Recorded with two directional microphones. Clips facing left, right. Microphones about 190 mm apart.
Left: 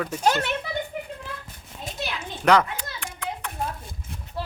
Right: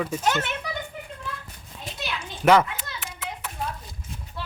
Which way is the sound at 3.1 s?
5° right (ahead or behind).